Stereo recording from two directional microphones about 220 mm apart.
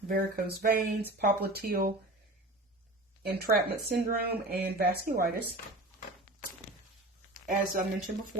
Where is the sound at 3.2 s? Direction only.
45° right (ahead or behind).